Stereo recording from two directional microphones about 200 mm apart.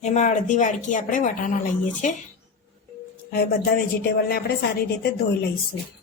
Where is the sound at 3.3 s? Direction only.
50° left (ahead or behind).